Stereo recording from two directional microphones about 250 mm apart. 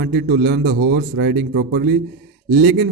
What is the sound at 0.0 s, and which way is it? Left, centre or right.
A man's voice, right.